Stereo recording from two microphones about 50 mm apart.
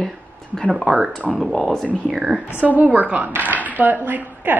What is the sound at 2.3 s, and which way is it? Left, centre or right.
A woman's voice, right.